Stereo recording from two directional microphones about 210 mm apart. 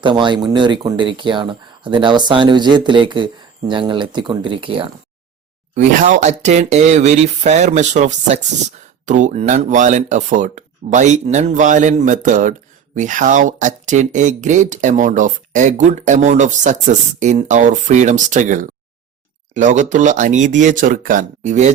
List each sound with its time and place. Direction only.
0.0 s speech: 20° right (ahead or behind)
5.7 s speech: 35° right (ahead or behind)